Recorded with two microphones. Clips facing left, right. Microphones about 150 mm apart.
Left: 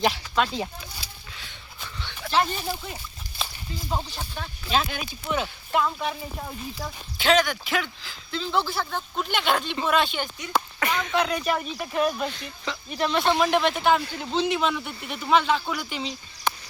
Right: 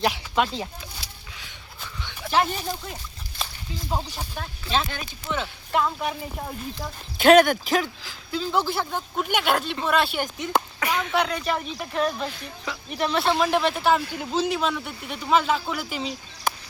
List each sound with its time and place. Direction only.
0.1 s speech: 10° right (ahead or behind)
1.8 s dog: 5° right (ahead or behind)
2.6 s a sound: centre (ahead or behind)
3.8 s speech: 10° right (ahead or behind)
4.7 s speech: 5° left (ahead or behind)
5.7 s speech: centre (ahead or behind)
7.2 s speech: 55° right (ahead or behind)
8.3 s speech: 10° right (ahead or behind); by 12.3 s 5° left (ahead or behind)
12.3 s speech: 5° right (ahead or behind)